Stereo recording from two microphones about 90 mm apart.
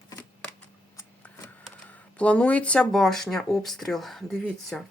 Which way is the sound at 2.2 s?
15° left (ahead or behind).